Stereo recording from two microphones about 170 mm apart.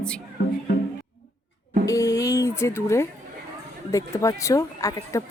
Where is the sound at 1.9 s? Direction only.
20° left (ahead or behind).